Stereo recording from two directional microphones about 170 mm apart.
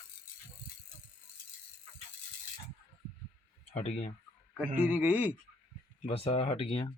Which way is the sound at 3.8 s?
35° left (ahead or behind).